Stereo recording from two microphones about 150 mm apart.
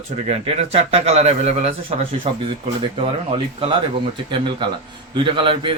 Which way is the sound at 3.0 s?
40° right (ahead or behind).